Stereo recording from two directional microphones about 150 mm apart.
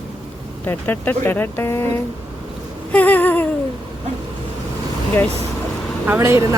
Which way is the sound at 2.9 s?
10° left (ahead or behind).